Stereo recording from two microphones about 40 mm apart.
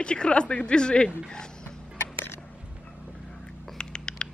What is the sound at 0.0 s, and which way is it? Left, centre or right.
Speech, left.